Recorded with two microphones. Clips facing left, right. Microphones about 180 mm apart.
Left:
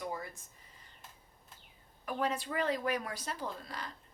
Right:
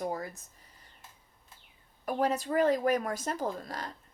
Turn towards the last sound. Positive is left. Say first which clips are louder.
# right 6 dB
turn(degrees=-45)  # may be behind; listen again after turning